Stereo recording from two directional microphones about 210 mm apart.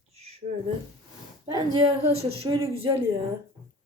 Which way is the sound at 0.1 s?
30° right (ahead or behind).